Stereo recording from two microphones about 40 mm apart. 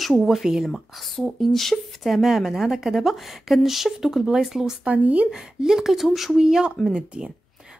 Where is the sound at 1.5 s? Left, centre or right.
Centre.